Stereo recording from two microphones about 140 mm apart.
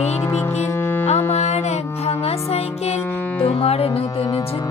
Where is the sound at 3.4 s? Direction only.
45° left (ahead or behind).